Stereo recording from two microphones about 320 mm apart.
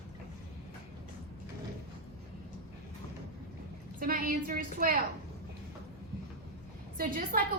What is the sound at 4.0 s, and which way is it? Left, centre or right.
Speech, right.